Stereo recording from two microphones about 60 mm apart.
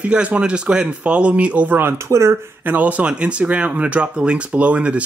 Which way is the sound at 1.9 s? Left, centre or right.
Right.